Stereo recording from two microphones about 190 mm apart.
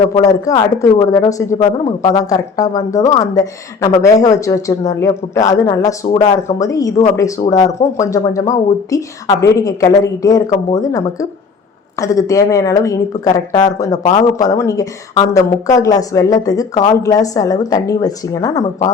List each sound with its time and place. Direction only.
0.0 s speech: 35° left (ahead or behind)
0.3 s a woman's voice: 15° left (ahead or behind)
7.4 s speech: 35° left (ahead or behind)
7.9 s a woman's voice: 15° left (ahead or behind)